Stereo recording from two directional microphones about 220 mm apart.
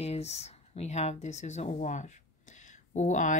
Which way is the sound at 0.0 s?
30° left (ahead or behind).